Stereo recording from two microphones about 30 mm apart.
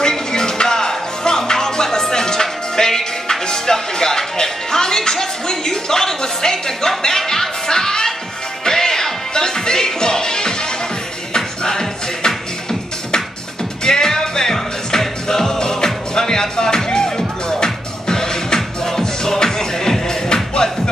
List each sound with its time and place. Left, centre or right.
0.0 s music: left
13.8 s music: centre
20.5 s music: left